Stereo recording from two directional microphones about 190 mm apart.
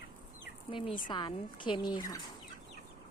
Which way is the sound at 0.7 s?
25° left (ahead or behind).